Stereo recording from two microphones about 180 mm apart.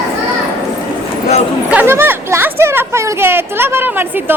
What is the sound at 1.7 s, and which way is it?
Speech, 10° right (ahead or behind).